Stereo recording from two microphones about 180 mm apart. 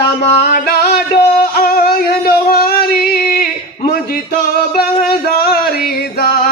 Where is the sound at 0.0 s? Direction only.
60° left (ahead or behind).